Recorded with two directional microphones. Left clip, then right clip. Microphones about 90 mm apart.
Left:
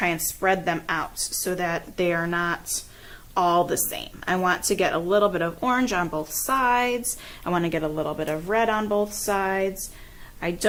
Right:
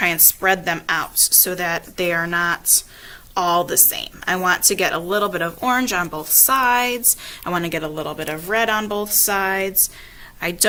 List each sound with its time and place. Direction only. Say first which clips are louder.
0.0 s a woman's voice: right 5 dB; 30° right (ahead or behind)